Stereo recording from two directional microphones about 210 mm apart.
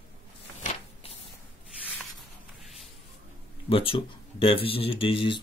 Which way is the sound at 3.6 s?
25° left (ahead or behind).